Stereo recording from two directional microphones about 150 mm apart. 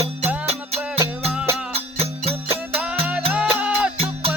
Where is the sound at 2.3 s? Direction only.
10° right (ahead or behind).